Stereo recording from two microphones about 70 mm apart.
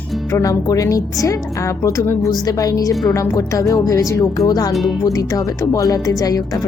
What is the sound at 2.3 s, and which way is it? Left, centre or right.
Speech, left.